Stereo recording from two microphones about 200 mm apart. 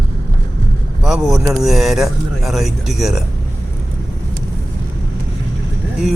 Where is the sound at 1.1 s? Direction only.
Centre (ahead or behind).